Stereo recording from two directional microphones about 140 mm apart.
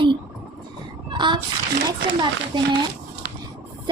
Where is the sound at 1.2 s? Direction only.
35° right (ahead or behind).